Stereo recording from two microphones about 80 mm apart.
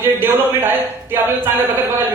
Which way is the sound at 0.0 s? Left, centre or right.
Right.